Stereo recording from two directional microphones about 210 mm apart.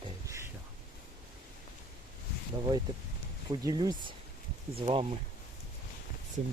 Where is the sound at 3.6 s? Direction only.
20° right (ahead or behind).